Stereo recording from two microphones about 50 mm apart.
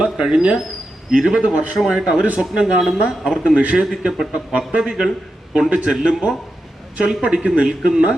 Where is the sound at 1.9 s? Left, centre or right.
Centre.